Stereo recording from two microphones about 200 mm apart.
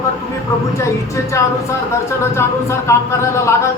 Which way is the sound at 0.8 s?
15° left (ahead or behind).